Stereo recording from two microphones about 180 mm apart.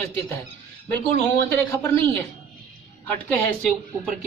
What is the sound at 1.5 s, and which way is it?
Speech, 10° left (ahead or behind).